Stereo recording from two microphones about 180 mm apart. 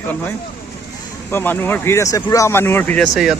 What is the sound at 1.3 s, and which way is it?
Speech, 10° left (ahead or behind).